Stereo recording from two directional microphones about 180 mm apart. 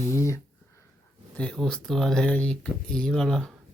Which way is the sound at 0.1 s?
15° left (ahead or behind).